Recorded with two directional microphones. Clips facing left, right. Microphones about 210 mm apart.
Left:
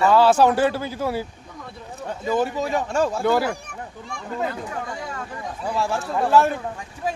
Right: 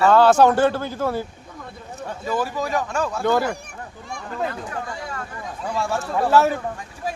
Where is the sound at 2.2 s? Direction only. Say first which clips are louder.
Left 2 dB; 25° left (ahead or behind).